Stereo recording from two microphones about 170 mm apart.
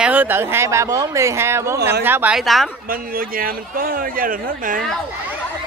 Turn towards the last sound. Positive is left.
turn(degrees=-55)  # may be behind; listen again after turning